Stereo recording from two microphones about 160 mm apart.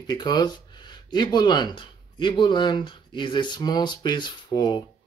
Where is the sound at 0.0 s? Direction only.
25° left (ahead or behind).